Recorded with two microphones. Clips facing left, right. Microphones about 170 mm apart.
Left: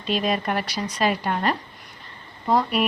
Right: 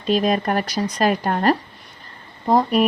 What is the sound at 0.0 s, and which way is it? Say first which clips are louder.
Speech: right 5 dB; 45° right (ahead or behind).